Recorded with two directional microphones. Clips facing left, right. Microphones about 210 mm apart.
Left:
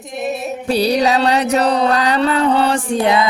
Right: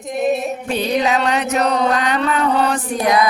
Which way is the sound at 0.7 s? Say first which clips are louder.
Left 4 dB; 35° left (ahead or behind).